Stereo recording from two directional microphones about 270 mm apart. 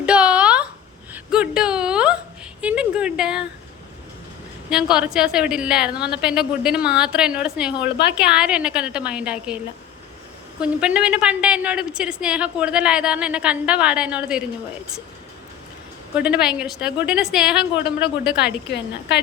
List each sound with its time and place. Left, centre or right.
0.0 s a sound: centre
4.7 s a woman's voice: centre
10.6 s a woman's voice: centre
16.1 s a woman's voice: centre
18.7 s a woman's voice: left